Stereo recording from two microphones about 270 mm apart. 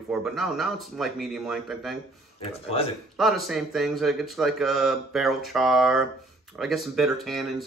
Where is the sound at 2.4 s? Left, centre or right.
Left.